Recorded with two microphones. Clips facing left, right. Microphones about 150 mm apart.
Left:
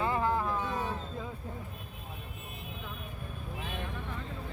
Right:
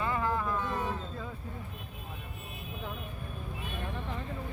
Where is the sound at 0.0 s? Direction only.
30° left (ahead or behind).